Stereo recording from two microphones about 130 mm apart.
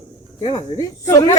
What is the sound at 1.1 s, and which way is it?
Speech, 25° left (ahead or behind).